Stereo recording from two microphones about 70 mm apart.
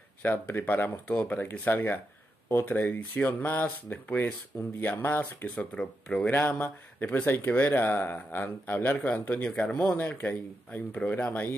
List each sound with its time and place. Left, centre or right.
0.2 s speech: left
5.8 s speech: centre
6.3 s speech: left